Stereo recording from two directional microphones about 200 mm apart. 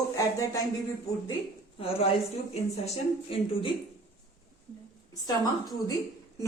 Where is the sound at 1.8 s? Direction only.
30° left (ahead or behind).